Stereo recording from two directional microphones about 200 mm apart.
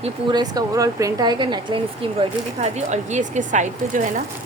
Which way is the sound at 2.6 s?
35° right (ahead or behind).